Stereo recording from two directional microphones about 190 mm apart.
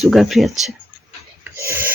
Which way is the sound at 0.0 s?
Centre (ahead or behind).